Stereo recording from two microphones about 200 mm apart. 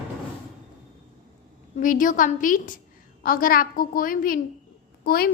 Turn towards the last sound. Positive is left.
turn(degrees=50)  # may be behind; listen again after turning